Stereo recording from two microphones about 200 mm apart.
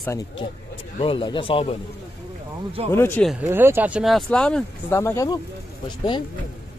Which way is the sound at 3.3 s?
10° right (ahead or behind).